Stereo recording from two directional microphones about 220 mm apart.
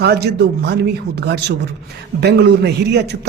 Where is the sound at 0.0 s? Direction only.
50° right (ahead or behind).